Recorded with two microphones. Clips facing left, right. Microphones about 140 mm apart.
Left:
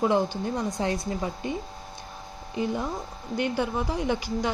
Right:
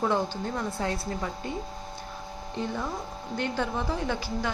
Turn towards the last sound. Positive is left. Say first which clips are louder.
# left 3 dB
turn(degrees=15)  # may be behind; listen again after turning